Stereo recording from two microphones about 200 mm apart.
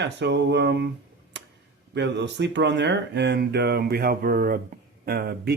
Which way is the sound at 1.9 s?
60° right (ahead or behind).